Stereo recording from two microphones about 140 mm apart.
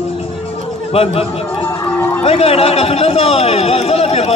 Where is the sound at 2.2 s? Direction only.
45° left (ahead or behind).